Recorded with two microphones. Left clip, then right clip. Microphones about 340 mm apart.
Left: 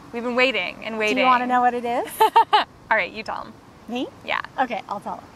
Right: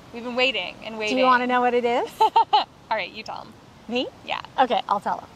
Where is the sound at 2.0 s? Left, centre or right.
Left.